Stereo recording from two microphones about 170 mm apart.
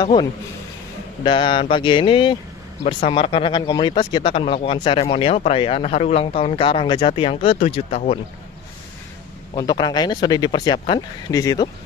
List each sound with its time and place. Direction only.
0.0 s speech: 25° left (ahead or behind)
9.6 s speech: 25° left (ahead or behind)